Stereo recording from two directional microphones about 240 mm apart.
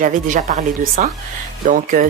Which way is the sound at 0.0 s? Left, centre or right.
Right.